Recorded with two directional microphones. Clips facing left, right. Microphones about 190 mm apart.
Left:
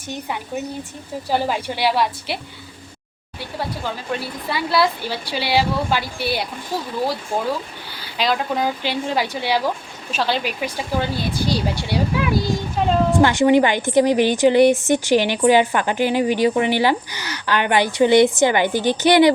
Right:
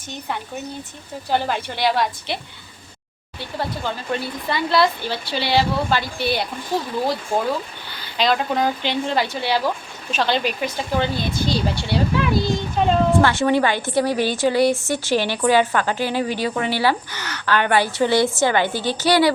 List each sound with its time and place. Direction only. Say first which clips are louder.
1.3 s a woman's voice: left 1 dB; 5° left (ahead or behind)
3.6 s a woman's voice: right 1 dB; 5° left (ahead or behind)
8.2 s a woman's voice: right 1 dB; 5° left (ahead or behind)